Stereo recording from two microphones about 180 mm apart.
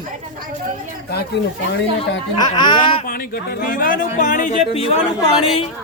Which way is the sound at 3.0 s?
55° left (ahead or behind).